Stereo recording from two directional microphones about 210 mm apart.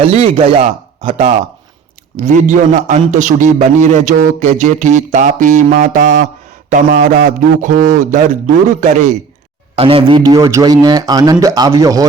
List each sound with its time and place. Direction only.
0.1 s a man's voice: 30° right (ahead or behind)